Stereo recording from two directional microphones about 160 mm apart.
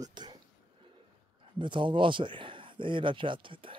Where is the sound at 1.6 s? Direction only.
30° right (ahead or behind).